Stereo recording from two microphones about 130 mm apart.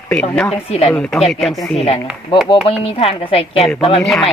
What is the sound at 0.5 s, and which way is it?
Speech, 50° left (ahead or behind).